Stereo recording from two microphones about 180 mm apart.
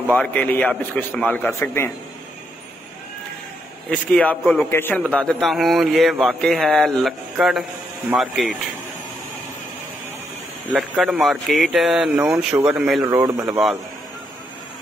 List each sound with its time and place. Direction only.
0.1 s a man's voice: 10° left (ahead or behind)
3.9 s a man's voice: 5° left (ahead or behind)
10.7 s speech: 5° right (ahead or behind)
13.0 s speech: 20° right (ahead or behind)